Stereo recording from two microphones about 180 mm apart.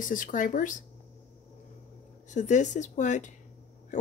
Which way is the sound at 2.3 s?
40° left (ahead or behind).